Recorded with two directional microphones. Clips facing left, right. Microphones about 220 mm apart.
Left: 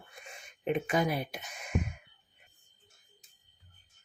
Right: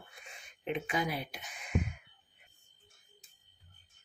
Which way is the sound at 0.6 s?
45° left (ahead or behind).